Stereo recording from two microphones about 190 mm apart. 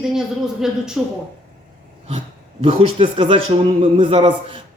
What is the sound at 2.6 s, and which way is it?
A man's voice, 30° right (ahead or behind).